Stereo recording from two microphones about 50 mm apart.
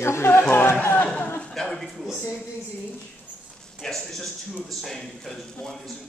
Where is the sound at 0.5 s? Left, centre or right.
Left.